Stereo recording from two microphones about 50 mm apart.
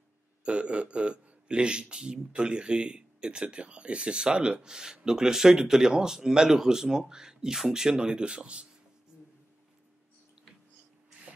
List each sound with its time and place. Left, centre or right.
0.4 s a man's voice: right
11.3 s shuffle: right